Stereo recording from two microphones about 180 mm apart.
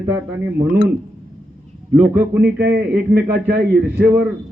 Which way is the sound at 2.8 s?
10° right (ahead or behind).